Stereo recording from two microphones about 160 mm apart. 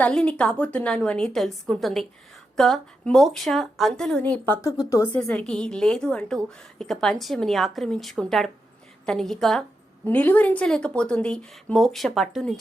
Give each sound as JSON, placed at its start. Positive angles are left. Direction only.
{"t": 0.0, "sound": "a woman's voice", "side_deg": 5}
{"t": 5.1, "sound": "a woman's voice", "side_deg": 10}